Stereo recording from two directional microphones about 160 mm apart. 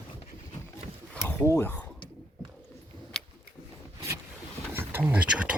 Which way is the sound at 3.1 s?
5° left (ahead or behind).